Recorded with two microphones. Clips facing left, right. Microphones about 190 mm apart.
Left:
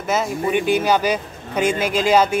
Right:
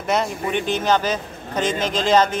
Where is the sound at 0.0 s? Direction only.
5° left (ahead or behind).